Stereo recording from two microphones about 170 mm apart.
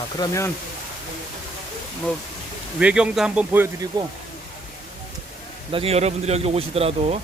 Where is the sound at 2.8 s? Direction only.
5° right (ahead or behind).